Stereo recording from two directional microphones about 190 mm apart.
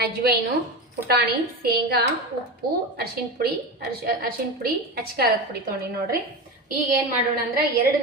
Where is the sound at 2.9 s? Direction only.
55° right (ahead or behind).